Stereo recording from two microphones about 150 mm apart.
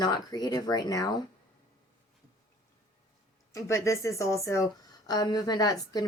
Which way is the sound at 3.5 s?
20° left (ahead or behind).